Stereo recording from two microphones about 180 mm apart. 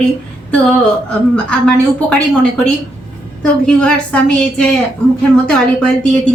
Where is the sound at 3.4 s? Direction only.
5° left (ahead or behind).